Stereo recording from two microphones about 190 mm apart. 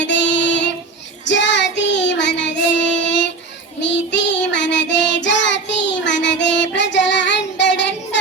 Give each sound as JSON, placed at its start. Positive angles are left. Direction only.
{"t": 0.0, "sound": "female singing", "side_deg": 70}
{"t": 1.3, "sound": "child singing", "side_deg": 70}